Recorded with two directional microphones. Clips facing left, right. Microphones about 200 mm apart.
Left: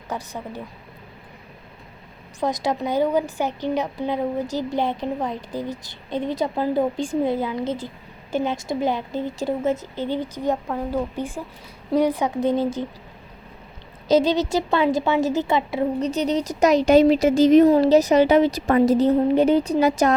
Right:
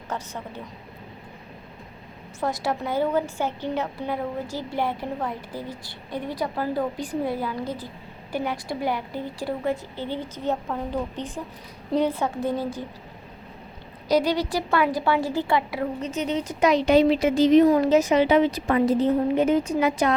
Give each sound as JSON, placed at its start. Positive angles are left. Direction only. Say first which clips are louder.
{"t": 0.1, "sound": "a woman's voice", "louder": "left 3 dB", "side_deg": 15}
{"t": 2.4, "sound": "a woman's voice", "louder": "left 3 dB", "side_deg": 20}
{"t": 14.1, "sound": "a woman's voice", "louder": "left 4 dB", "side_deg": 25}
{"t": 16.0, "sound": "speech", "louder": "left 5 dB", "side_deg": 35}
{"t": 17.7, "sound": "a woman's voice", "louder": "left 3 dB", "side_deg": 35}